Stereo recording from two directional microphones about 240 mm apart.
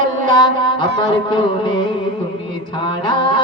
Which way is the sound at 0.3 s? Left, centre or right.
Centre.